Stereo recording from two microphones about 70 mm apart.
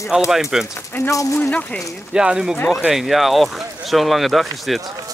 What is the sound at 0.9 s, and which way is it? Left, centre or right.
Speech, left.